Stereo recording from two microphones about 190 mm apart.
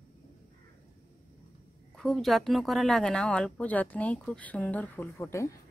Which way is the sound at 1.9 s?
Centre (ahead or behind).